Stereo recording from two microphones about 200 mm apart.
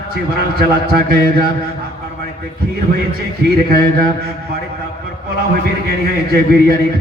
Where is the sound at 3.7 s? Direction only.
50° right (ahead or behind).